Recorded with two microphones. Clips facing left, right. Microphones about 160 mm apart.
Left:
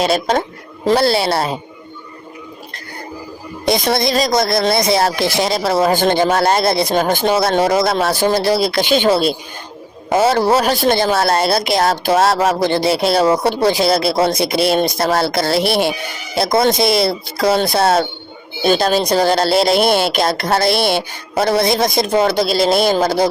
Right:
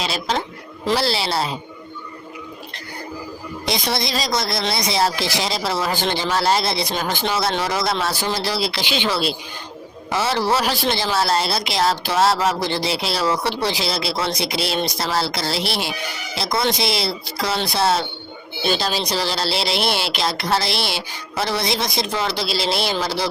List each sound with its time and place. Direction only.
0.0 s speech: 50° left (ahead or behind)
3.7 s speech: 50° left (ahead or behind)